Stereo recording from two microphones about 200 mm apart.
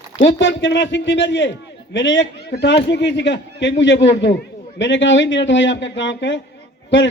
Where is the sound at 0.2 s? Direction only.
65° left (ahead or behind).